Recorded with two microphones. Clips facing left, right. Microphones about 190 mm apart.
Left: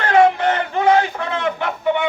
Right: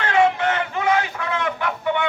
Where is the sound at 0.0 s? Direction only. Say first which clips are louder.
Left 4 dB; 40° left (ahead or behind).